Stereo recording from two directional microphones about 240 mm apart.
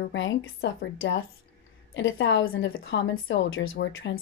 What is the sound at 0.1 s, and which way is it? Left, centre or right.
A woman's voice, left.